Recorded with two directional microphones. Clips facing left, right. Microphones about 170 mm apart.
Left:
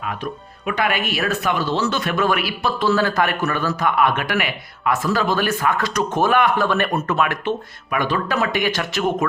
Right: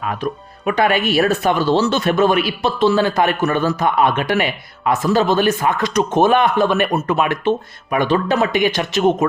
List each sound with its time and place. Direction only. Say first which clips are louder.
0.6 s speech: right 5 dB; 30° right (ahead or behind)